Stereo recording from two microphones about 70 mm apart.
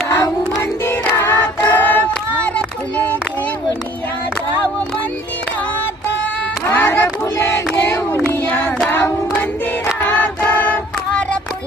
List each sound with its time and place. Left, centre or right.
0.9 s choir: left
1.7 s a sound: left
2.6 s child singing: left
6.7 s child singing: left
8.9 s hands: left
10.0 s choir: left
10.5 s hands: left